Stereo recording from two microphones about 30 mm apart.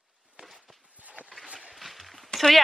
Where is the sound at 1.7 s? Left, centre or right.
Centre.